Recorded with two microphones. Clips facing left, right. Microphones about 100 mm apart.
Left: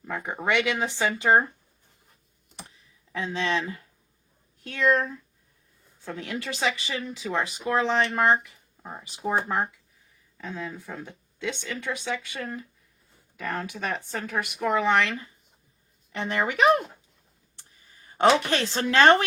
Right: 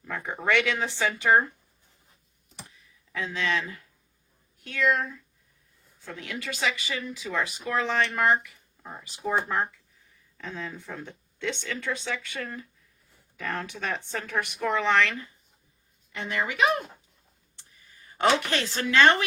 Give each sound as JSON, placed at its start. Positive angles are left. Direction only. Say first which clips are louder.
{"t": 0.0, "sound": "speech", "louder": "left 1 dB", "side_deg": 15}
{"t": 2.6, "sound": "a sound", "louder": "left 1 dB", "side_deg": 25}
{"t": 4.6, "sound": "speech", "louder": "left 2 dB", "side_deg": 35}
{"t": 6.6, "sound": "speech", "louder": "left 1 dB", "side_deg": 25}
{"t": 14.6, "sound": "speech", "louder": "left 1 dB", "side_deg": 15}
{"t": 16.1, "sound": "speech", "louder": "left 3 dB", "side_deg": 50}
{"t": 17.9, "sound": "a woman's voice", "louder": "left 3 dB", "side_deg": 25}